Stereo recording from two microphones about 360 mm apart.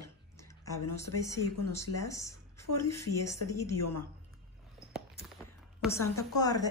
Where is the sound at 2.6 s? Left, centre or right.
Left.